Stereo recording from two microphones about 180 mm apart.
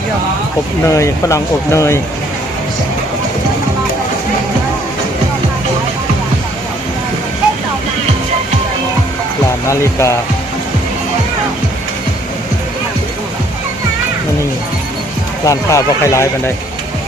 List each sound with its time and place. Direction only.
0.9 s speech: 15° left (ahead or behind)
9.6 s speech: 15° left (ahead or behind)
15.4 s speech: 15° left (ahead or behind)